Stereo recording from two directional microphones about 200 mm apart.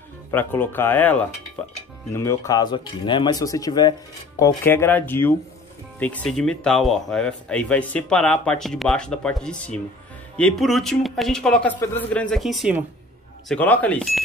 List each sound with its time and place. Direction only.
0.3 s speech: 10° left (ahead or behind)
13.5 s speech: 5° left (ahead or behind)